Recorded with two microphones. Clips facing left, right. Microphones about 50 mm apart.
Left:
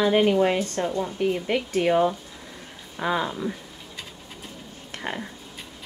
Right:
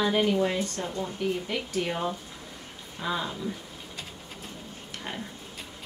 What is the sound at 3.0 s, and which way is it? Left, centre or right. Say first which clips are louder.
Speech: left 6 dB; left.